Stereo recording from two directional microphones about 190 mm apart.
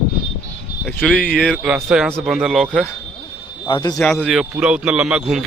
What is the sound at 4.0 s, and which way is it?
A man's voice, centre (ahead or behind).